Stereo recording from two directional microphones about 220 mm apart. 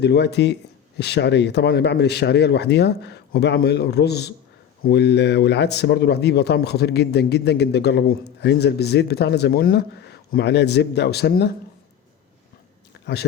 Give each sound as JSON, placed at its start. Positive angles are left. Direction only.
{"t": 0.0, "sound": "a man's voice", "side_deg": 50}
{"t": 13.1, "sound": "a man's voice", "side_deg": 50}